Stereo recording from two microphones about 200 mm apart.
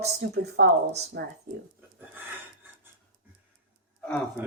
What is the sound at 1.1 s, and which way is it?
Speech, 60° right (ahead or behind).